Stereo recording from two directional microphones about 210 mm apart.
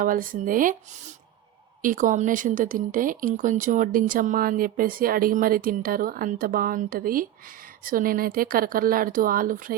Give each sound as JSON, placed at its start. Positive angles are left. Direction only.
{"t": 0.0, "sound": "speech", "side_deg": -40}